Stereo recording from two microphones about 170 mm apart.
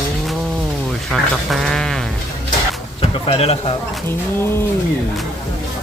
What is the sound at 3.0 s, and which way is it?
Speech, 35° left (ahead or behind).